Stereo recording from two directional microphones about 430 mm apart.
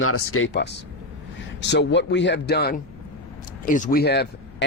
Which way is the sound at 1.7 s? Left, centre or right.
Left.